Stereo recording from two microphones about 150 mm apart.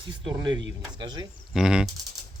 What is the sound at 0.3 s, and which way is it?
Speech, 30° right (ahead or behind).